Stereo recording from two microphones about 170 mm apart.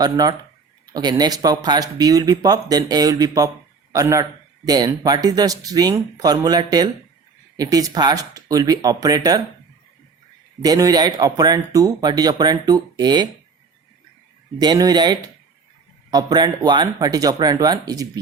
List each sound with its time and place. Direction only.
0.0 s a man's voice: 25° right (ahead or behind)
10.6 s a man's voice: 20° right (ahead or behind)
14.6 s a man's voice: 25° right (ahead or behind)